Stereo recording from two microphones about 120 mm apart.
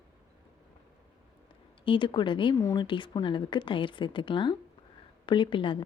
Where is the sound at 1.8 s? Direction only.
45° left (ahead or behind).